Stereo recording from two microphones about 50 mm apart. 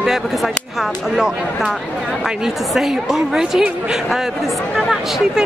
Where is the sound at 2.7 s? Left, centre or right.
Centre.